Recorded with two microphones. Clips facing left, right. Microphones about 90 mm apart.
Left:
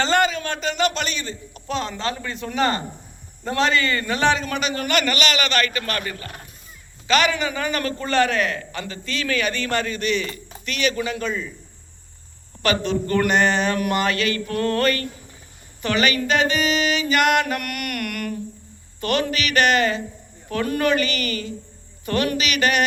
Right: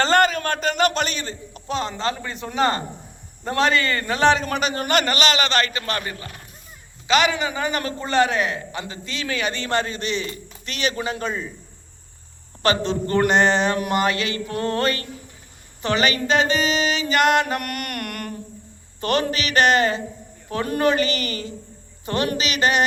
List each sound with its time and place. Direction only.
0.0 s a man's voice: 45° right (ahead or behind)
1.6 s a man's voice: 20° right (ahead or behind); by 11.5 s 35° right (ahead or behind)
12.6 s a man's voice: 30° right (ahead or behind)